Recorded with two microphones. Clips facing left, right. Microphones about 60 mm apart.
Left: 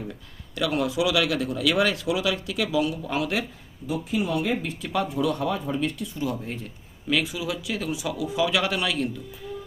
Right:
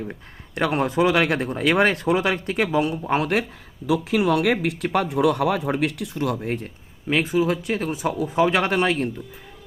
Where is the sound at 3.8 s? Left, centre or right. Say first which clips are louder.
Right 7 dB; right.